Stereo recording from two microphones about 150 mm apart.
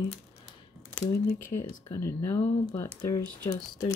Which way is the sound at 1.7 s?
20° left (ahead or behind).